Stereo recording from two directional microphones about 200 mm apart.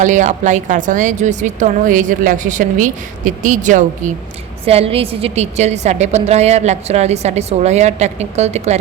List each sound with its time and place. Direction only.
0.0 s a woman's voice: 40° right (ahead or behind)